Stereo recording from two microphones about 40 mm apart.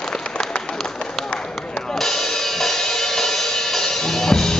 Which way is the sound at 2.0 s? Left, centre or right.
Centre.